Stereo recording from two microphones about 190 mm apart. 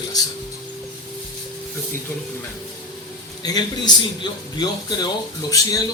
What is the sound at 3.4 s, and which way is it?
Speech, 20° left (ahead or behind).